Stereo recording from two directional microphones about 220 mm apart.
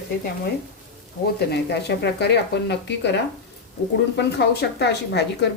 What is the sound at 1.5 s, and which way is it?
Speech, 50° left (ahead or behind).